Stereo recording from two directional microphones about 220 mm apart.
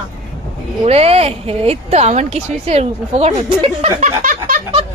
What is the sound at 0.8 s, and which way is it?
Speech, 30° right (ahead or behind).